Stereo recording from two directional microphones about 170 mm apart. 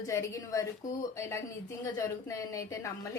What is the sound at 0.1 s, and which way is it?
A woman's voice, 15° left (ahead or behind).